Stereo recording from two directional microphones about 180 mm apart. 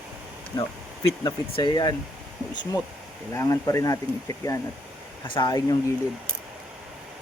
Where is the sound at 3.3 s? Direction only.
20° left (ahead or behind).